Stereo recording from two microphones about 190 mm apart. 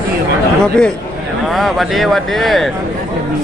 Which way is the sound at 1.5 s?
Centre (ahead or behind).